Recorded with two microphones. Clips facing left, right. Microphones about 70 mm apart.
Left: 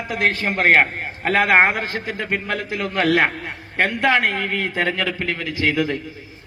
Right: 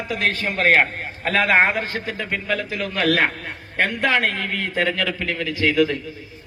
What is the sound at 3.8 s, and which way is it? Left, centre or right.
A man's voice, left.